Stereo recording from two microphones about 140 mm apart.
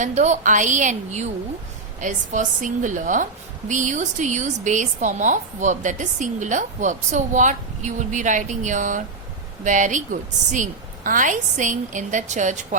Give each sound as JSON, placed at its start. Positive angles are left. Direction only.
{"t": 0.0, "sound": "a woman's voice", "side_deg": -55}